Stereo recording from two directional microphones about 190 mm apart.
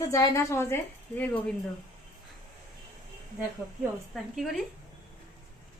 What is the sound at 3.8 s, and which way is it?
Speech, centre (ahead or behind).